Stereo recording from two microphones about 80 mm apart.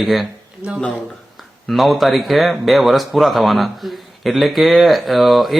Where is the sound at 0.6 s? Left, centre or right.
Centre.